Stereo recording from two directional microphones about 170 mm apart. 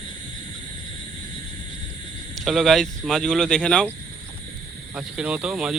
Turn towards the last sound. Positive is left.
turn(degrees=-5)  # may be behind; listen again after turning